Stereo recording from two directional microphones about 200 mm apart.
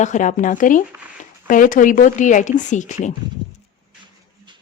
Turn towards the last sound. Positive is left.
turn(degrees=40)  # may be behind; listen again after turning